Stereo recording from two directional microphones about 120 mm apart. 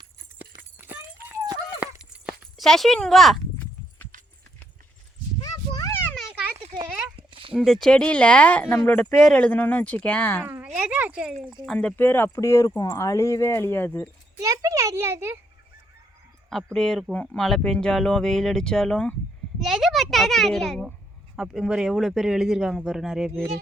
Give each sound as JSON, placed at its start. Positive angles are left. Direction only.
{"t": 0.3, "sound": "horse", "side_deg": -15}
{"t": 1.8, "sound": "clip-clop", "side_deg": -5}
{"t": 2.6, "sound": "speech", "side_deg": 0}
{"t": 5.4, "sound": "a sound", "side_deg": 30}
{"t": 7.2, "sound": "a sound", "side_deg": -45}
{"t": 7.5, "sound": "speech", "side_deg": 0}
{"t": 10.4, "sound": "a sound", "side_deg": -15}
{"t": 11.6, "sound": "speech", "side_deg": 5}
{"t": 14.3, "sound": "a child's voice", "side_deg": -30}
{"t": 16.7, "sound": "a child's voice", "side_deg": 5}